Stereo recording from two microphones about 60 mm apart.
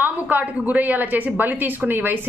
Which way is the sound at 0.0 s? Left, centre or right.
Right.